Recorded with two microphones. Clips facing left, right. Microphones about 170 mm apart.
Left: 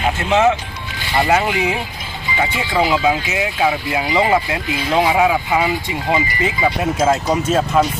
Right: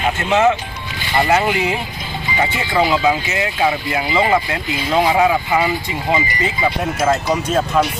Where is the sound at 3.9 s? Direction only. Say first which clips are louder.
Left 1 dB; 15° left (ahead or behind).